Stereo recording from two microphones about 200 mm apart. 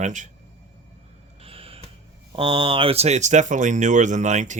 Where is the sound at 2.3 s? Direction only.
25° right (ahead or behind).